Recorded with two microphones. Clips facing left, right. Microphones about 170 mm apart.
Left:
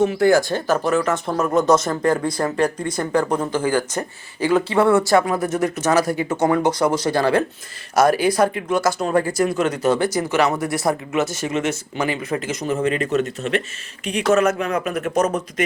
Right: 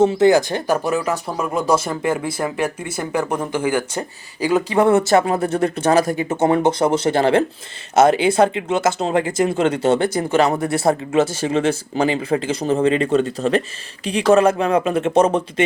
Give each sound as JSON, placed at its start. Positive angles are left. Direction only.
{"t": 0.0, "sound": "speech", "side_deg": -25}